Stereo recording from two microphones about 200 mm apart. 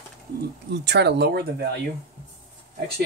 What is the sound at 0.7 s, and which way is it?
Speech, 60° right (ahead or behind).